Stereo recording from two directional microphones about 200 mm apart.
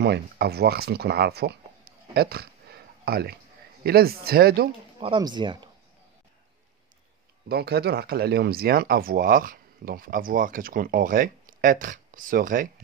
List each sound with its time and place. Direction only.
0.0 s speech: 55° right (ahead or behind)
2.1 s a sound: 50° right (ahead or behind)
3.8 s speech: 50° right (ahead or behind)
5.0 s speech: 25° right (ahead or behind)
7.4 s speech: 55° right (ahead or behind)